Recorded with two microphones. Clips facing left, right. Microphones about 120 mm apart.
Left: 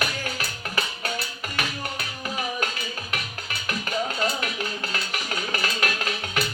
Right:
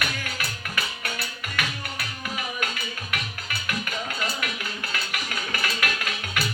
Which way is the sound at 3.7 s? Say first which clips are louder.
Left 4 dB; 30° left (ahead or behind).